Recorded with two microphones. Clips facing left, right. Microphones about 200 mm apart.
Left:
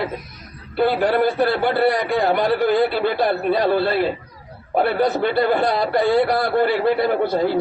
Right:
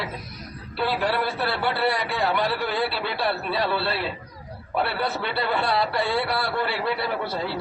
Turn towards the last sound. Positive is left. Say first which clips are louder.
# left 9 dB
turn(degrees=50)  # may be behind; listen again after turning